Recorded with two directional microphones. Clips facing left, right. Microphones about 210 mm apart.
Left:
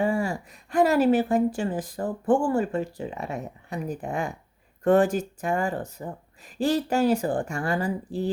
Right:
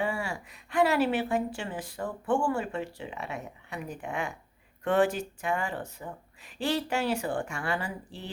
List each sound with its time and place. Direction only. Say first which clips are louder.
0.0 s a woman's voice: left 7 dB; 40° left (ahead or behind)